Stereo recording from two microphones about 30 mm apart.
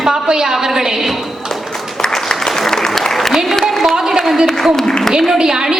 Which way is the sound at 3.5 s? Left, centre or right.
Centre.